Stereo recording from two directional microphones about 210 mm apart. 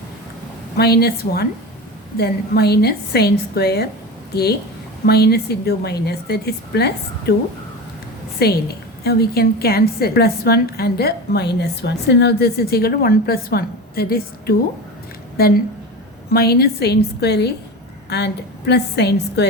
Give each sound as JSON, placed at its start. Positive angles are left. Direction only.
{"t": 0.8, "sound": "a woman's voice", "side_deg": 50}
{"t": 5.0, "sound": "a woman's voice", "side_deg": 50}
{"t": 8.4, "sound": "a woman's voice", "side_deg": 50}